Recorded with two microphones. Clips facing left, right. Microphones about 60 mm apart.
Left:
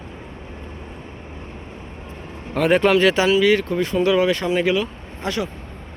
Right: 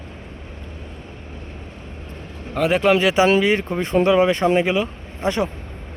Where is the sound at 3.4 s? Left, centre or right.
Right.